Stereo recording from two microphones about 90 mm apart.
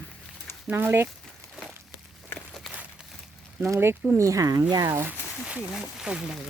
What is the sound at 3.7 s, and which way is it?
Speech, 25° right (ahead or behind).